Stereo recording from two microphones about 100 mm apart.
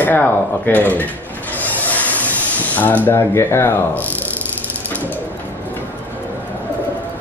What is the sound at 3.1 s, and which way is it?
Speech, 25° left (ahead or behind).